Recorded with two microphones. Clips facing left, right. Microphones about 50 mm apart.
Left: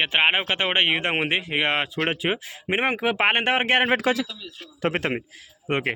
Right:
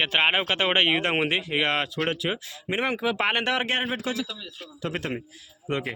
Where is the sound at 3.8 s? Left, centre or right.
Left.